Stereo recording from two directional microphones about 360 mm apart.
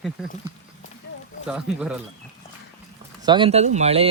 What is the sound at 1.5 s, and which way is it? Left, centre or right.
Speech, centre.